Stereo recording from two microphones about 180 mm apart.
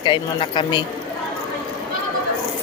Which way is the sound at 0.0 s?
25° left (ahead or behind).